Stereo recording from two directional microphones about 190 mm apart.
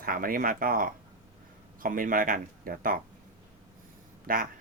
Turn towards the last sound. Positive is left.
turn(degrees=-50)  # may be behind; listen again after turning